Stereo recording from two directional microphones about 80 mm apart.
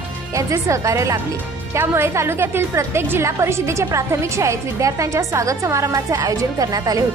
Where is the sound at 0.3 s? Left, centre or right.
Right.